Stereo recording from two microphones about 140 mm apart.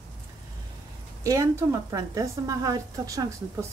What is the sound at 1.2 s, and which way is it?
A woman's voice, 20° right (ahead or behind).